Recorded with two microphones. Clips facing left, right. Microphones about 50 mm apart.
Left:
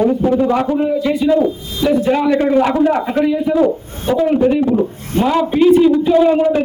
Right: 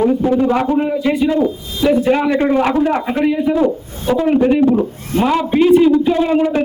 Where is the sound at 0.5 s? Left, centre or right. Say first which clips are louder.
Even; centre.